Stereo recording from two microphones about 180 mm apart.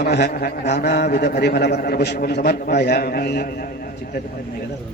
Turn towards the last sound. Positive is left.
turn(degrees=65)  # may be behind; listen again after turning